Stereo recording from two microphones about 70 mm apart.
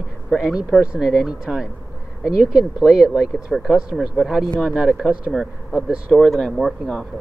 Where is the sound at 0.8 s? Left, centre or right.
Centre.